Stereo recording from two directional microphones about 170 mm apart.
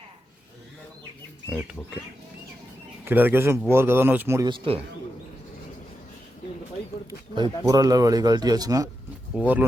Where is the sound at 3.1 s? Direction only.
10° right (ahead or behind).